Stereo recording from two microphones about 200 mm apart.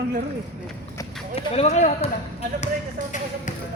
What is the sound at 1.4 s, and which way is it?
Speech, 30° left (ahead or behind).